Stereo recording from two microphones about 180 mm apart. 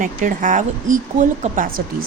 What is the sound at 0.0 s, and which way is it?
A woman's voice, 50° right (ahead or behind).